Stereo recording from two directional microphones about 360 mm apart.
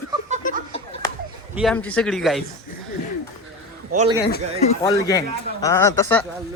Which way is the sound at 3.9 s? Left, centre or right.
Centre.